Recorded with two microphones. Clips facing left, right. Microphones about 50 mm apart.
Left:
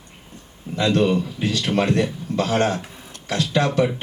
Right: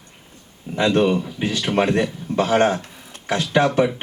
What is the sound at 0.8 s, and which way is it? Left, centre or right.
A man's voice, right.